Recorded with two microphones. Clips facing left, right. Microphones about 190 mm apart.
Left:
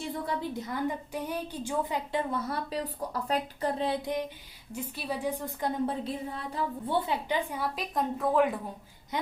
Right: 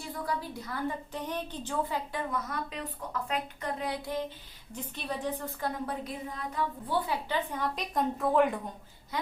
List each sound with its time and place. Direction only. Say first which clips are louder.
0.0 s a woman's voice: left 2 dB; 25° left (ahead or behind)
2.3 s a woman's voice: left 3 dB; 30° left (ahead or behind)
4.7 s a woman's voice: left 2 dB; 10° left (ahead or behind)
6.1 s a woman's voice: left 3 dB; 30° left (ahead or behind); by 8.5 s centre (ahead or behind)